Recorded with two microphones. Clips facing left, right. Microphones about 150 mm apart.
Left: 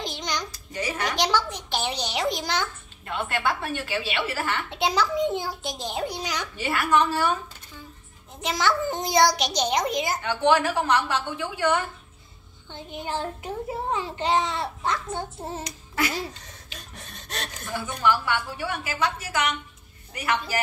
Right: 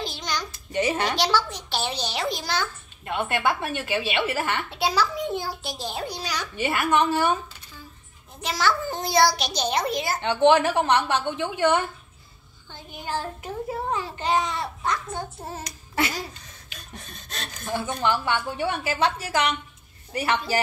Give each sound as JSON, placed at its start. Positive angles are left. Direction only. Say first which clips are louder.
{"t": 0.0, "sound": "a sound", "louder": "even", "side_deg": 20}
{"t": 0.5, "sound": "babbling", "louder": "right 6 dB", "side_deg": -25}
{"t": 1.1, "sound": "a child's voice", "louder": "right 1 dB", "side_deg": 15}
{"t": 3.1, "sound": "a woman's voice", "louder": "right 2 dB", "side_deg": -15}
{"t": 4.6, "sound": "a child's voice", "louder": "even", "side_deg": 20}
{"t": 6.5, "sound": "a woman's voice", "louder": "right 1 dB", "side_deg": -20}
{"t": 8.4, "sound": "a child's voice", "louder": "even", "side_deg": 20}
{"t": 10.2, "sound": "a woman's voice", "louder": "right 4 dB", "side_deg": -25}
{"t": 12.7, "sound": "a child's voice", "louder": "even", "side_deg": 20}
{"t": 17.6, "sound": "a woman's voice", "louder": "even", "side_deg": -30}